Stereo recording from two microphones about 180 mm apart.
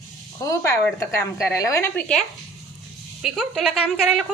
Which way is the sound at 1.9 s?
5° left (ahead or behind).